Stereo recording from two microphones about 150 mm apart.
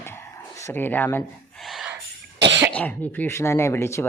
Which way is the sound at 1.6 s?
Centre (ahead or behind).